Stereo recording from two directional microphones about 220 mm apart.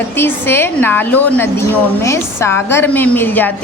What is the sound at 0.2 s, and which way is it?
A woman's voice, 10° left (ahead or behind).